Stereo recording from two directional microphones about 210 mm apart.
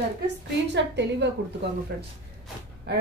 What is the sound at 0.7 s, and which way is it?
Speech, 55° right (ahead or behind).